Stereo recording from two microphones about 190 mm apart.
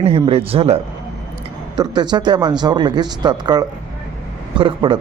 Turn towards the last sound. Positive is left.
turn(degrees=-25)  # may be behind; listen again after turning